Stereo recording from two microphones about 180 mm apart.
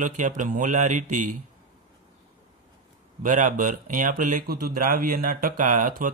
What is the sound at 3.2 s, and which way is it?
Speech, 45° right (ahead or behind).